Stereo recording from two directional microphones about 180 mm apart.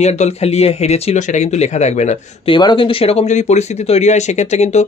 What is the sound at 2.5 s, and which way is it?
Speech, 25° left (ahead or behind).